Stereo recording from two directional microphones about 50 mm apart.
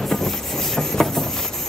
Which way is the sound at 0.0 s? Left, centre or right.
Centre.